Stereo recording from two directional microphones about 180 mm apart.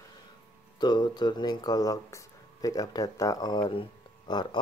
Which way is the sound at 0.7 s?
25° left (ahead or behind).